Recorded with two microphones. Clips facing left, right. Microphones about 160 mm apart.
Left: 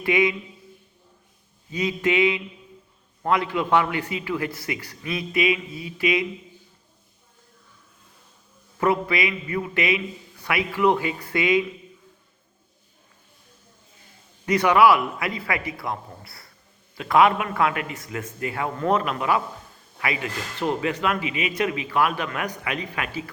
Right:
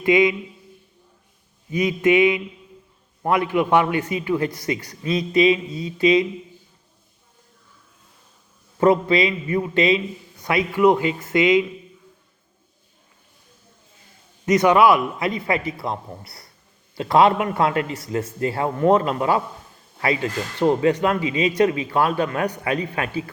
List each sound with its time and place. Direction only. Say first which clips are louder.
0.0 s a man's voice: right 5 dB; 20° right (ahead or behind)
1.9 s a man's voice: right 5 dB; 20° right (ahead or behind)
8.8 s a man's voice: right 6 dB; 25° right (ahead or behind)
14.4 s a man's voice: right 2 dB; 20° right (ahead or behind)
20.6 s a man's voice: right 7 dB; 25° right (ahead or behind)